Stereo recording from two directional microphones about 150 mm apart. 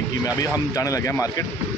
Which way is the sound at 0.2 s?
20° left (ahead or behind).